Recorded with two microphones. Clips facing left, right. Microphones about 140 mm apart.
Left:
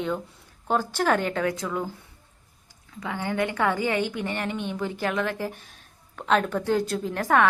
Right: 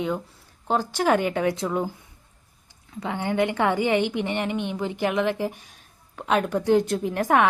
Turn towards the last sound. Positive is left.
turn(degrees=-15)  # may be behind; listen again after turning